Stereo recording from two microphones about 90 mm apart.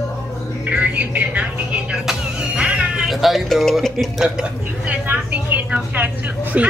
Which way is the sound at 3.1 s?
Centre (ahead or behind).